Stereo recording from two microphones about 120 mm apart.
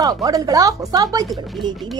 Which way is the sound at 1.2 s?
Centre (ahead or behind).